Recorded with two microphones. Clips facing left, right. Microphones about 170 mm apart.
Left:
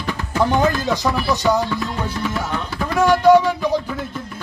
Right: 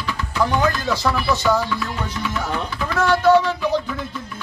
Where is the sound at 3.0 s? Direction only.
15° left (ahead or behind).